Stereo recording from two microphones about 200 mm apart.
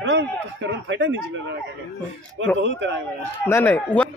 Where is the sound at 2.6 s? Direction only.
65° right (ahead or behind).